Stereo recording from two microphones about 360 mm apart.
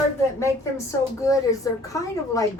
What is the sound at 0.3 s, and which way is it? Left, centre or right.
A woman's voice, centre.